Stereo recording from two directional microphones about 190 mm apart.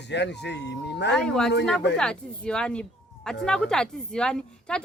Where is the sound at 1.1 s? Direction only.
5° left (ahead or behind).